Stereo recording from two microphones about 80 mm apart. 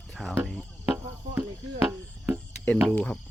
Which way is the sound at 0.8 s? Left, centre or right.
Right.